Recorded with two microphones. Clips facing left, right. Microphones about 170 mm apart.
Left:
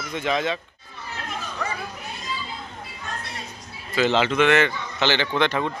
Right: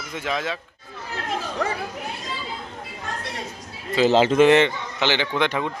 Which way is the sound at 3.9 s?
35° right (ahead or behind).